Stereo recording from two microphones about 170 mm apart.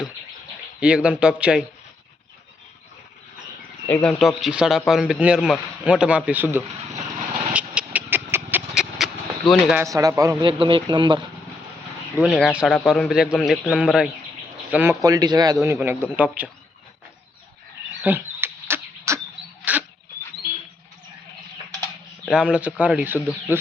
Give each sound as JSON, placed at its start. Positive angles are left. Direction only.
{"t": 0.8, "sound": "speech", "side_deg": -5}
{"t": 3.8, "sound": "speech", "side_deg": 5}
{"t": 7.5, "sound": "vehicle", "side_deg": -5}
{"t": 9.5, "sound": "speech", "side_deg": 0}
{"t": 9.8, "sound": "speech", "side_deg": -20}
{"t": 10.6, "sound": "speech", "side_deg": -30}
{"t": 12.2, "sound": "speech", "side_deg": -5}
{"t": 18.0, "sound": "a sound", "side_deg": -10}
{"t": 19.7, "sound": "dog", "side_deg": -10}
{"t": 22.3, "sound": "speech", "side_deg": -5}